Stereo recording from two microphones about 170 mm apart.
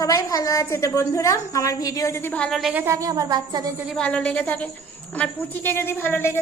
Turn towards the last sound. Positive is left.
turn(degrees=15)  # may be behind; listen again after turning